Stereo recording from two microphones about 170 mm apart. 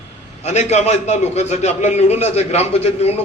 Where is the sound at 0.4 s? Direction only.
40° left (ahead or behind).